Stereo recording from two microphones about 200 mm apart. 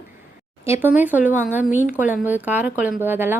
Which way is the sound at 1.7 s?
40° left (ahead or behind).